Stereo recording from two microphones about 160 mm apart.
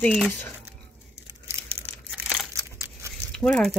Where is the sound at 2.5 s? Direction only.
15° right (ahead or behind).